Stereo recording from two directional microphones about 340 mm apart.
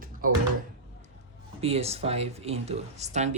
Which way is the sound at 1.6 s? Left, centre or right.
Centre.